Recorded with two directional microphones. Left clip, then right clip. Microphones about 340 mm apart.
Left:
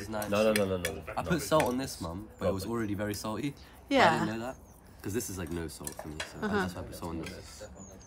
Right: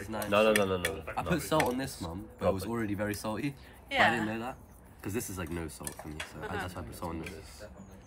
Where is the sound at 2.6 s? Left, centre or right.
Centre.